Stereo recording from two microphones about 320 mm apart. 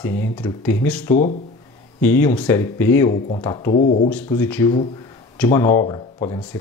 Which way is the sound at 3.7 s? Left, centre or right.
Left.